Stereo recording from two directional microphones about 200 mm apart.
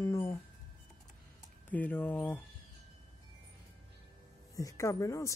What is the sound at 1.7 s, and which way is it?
Speech, 10° left (ahead or behind).